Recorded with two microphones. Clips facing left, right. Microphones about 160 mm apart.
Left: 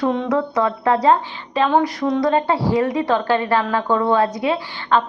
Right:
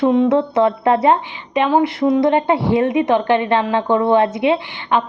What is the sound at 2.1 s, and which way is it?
A woman's voice, 20° right (ahead or behind).